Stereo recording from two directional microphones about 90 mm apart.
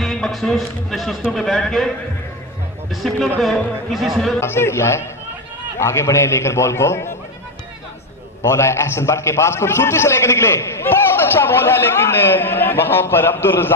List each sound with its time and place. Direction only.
0.0 s a man's voice: centre (ahead or behind)
2.9 s a man's voice: centre (ahead or behind)
4.4 s a man's voice: 30° left (ahead or behind)
8.4 s a man's voice: 30° left (ahead or behind)